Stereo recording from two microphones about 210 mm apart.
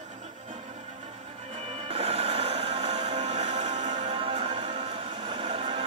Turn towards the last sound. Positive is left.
turn(degrees=-30)  # may be behind; listen again after turning